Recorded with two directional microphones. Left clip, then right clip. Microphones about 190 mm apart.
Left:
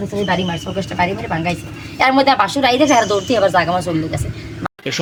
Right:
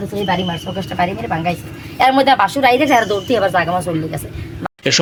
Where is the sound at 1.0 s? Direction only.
Centre (ahead or behind).